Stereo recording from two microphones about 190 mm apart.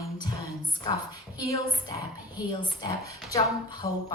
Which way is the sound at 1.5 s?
20° left (ahead or behind).